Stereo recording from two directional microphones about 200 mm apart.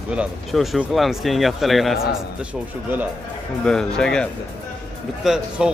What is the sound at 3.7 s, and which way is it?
Speech, 5° left (ahead or behind).